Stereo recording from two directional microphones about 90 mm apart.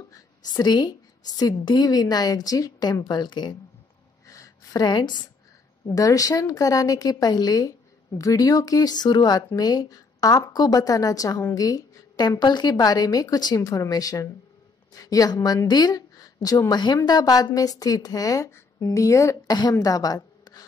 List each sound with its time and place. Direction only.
0.1 s speech: 50° left (ahead or behind)
4.3 s a sound: 40° left (ahead or behind); by 5.2 s 55° left (ahead or behind)
5.9 s a woman's voice: 40° left (ahead or behind)
19.5 s a woman's voice: 50° left (ahead or behind)